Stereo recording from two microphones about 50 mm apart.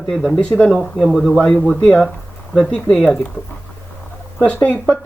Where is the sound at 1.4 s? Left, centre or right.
Centre.